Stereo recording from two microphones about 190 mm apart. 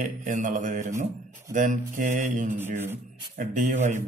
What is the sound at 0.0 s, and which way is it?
Speech, 40° right (ahead or behind).